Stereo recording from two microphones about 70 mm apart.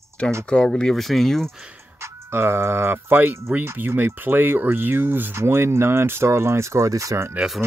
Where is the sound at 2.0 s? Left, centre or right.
Right.